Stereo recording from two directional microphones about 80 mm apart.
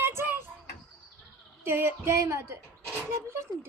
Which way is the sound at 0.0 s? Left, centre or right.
Right.